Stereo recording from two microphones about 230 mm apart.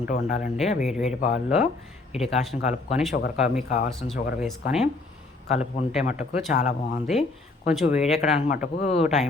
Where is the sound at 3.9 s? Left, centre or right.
Centre.